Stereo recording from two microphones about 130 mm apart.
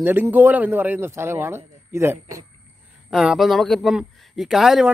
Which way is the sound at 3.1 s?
5° right (ahead or behind).